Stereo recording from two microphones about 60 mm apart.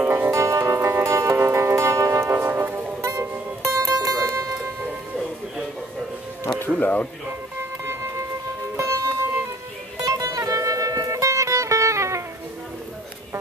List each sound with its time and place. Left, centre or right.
0.0 s music: right
6.8 s speech: left
7.8 s music: right
9.9 s music: right